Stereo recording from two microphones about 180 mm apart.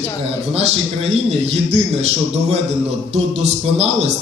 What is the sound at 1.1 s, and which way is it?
A man's voice, 35° right (ahead or behind).